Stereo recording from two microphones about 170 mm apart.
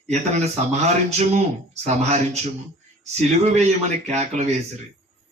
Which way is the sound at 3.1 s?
40° right (ahead or behind).